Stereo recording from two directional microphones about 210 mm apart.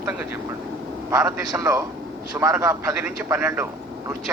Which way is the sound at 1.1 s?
15° right (ahead or behind).